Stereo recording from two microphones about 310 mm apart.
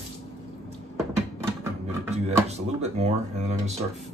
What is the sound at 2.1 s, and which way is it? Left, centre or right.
Speech, right.